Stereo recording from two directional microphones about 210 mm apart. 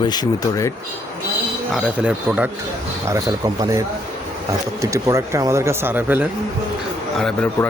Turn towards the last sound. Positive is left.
turn(degrees=5)  # may be behind; listen again after turning